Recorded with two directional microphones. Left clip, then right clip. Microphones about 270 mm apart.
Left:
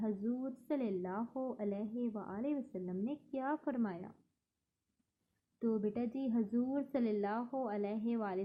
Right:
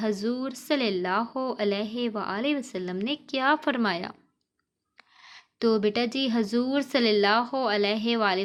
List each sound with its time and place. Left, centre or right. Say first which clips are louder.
0.0 s a woman's voice: right 12 dB; centre
5.5 s a woman's voice: right 14 dB; right
6.9 s speech: right 17 dB; centre